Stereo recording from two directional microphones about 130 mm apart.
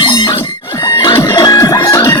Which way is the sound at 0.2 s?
35° left (ahead or behind).